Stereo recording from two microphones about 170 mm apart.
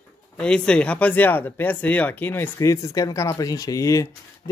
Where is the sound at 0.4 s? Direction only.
5° left (ahead or behind).